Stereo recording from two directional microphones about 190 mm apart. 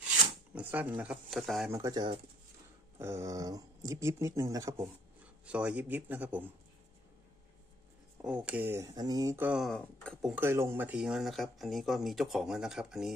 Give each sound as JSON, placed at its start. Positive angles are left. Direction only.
{"t": 0.6, "sound": "speech", "side_deg": -10}
{"t": 1.7, "sound": "speech", "side_deg": -20}
{"t": 5.4, "sound": "speech", "side_deg": -5}
{"t": 8.2, "sound": "speech", "side_deg": -5}
{"t": 9.5, "sound": "speech", "side_deg": 0}
{"t": 10.3, "sound": "speech", "side_deg": -15}